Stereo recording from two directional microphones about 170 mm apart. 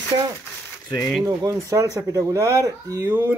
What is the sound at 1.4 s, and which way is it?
Speech, 20° right (ahead or behind).